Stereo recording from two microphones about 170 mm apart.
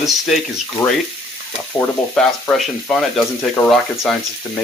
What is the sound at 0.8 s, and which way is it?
Speech, 20° left (ahead or behind).